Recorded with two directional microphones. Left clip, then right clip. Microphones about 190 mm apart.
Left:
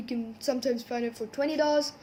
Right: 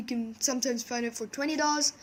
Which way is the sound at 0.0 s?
35° right (ahead or behind).